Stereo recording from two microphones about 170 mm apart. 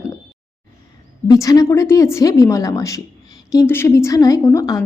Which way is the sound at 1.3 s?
20° left (ahead or behind).